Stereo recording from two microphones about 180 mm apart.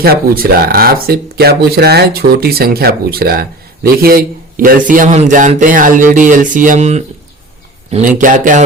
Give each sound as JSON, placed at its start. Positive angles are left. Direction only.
{"t": 0.0, "sound": "a man's voice", "side_deg": -55}